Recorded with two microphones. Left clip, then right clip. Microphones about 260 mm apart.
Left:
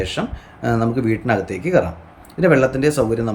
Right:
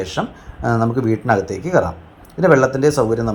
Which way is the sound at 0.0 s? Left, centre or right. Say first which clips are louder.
Right 1 dB; centre.